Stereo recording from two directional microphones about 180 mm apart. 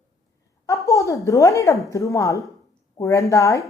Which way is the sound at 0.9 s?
15° left (ahead or behind).